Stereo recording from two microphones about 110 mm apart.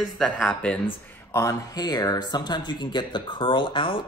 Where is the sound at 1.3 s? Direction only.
30° left (ahead or behind).